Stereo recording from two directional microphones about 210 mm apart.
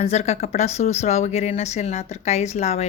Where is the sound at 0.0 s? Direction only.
30° left (ahead or behind).